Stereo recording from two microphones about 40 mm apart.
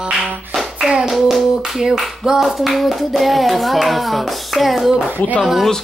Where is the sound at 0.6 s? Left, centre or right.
Centre.